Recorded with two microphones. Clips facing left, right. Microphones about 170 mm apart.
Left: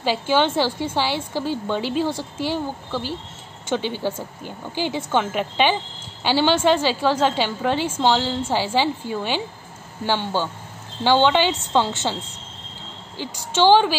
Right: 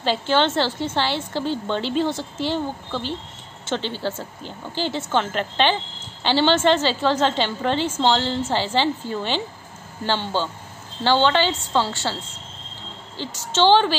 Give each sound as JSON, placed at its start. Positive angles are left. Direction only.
{"t": 0.0, "sound": "a woman's voice", "side_deg": 10}
{"t": 13.2, "sound": "a woman's voice", "side_deg": 15}